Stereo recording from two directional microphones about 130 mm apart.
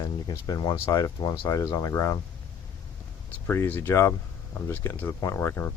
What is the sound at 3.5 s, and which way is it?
Speech, 20° left (ahead or behind).